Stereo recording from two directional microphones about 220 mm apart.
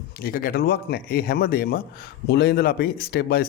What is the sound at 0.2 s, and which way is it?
Speech, 40° left (ahead or behind).